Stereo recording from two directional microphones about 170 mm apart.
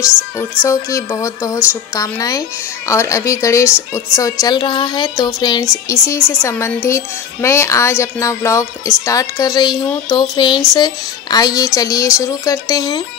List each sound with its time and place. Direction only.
0.0 s a woman's voice: 15° left (ahead or behind)